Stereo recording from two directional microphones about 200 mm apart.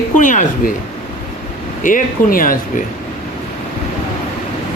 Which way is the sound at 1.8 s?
40° left (ahead or behind).